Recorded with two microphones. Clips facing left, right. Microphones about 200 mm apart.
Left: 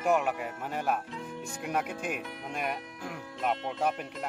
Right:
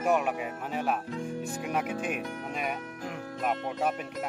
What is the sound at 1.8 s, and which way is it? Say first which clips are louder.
Speech: right 3 dB; 55° right (ahead or behind).